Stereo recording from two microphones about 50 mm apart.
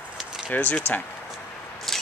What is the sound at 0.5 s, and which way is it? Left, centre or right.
Speech, left.